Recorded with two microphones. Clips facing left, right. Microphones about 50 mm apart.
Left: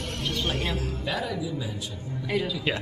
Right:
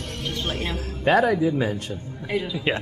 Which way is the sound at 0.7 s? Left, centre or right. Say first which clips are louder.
Right 10 dB; right.